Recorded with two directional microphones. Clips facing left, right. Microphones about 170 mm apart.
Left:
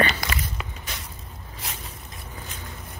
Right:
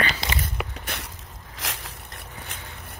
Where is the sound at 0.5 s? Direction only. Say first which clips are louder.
Right 4 dB; 60° right (ahead or behind).